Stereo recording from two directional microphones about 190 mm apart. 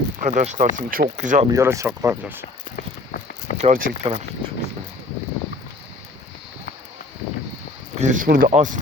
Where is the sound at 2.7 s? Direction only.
50° left (ahead or behind).